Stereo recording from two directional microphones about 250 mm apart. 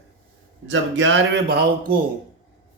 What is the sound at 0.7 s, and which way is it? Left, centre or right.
Speech, right.